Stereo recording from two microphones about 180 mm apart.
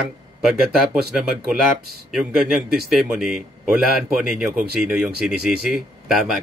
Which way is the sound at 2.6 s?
60° right (ahead or behind).